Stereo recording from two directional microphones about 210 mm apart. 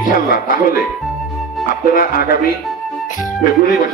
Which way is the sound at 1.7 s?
40° left (ahead or behind).